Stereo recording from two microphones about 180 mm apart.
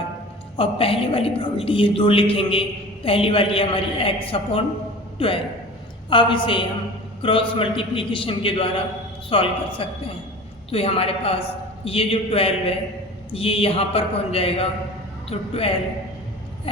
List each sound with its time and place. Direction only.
0.5 s a woman's voice: 30° left (ahead or behind)